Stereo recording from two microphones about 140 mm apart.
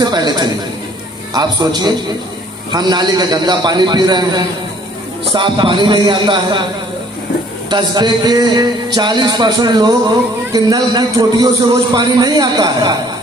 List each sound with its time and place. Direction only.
0.0 s a sound: 30° right (ahead or behind)
1.3 s a woman's voice: 30° right (ahead or behind)
7.7 s a woman's voice: 30° right (ahead or behind)